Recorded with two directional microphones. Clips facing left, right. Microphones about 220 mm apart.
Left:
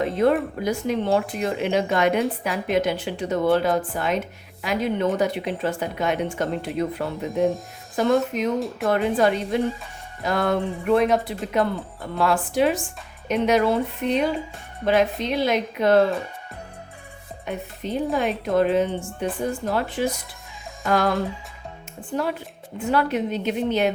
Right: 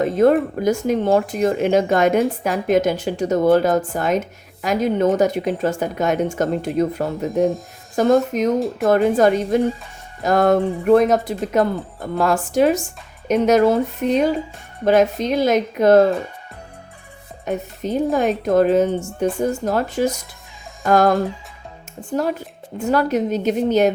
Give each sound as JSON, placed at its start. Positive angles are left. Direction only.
{"t": 0.0, "sound": "a sound", "side_deg": -45}
{"t": 0.6, "sound": "speech", "side_deg": -45}
{"t": 8.5, "sound": "speech", "side_deg": 0}
{"t": 8.9, "sound": "speech", "side_deg": -45}
{"t": 17.4, "sound": "speech", "side_deg": -45}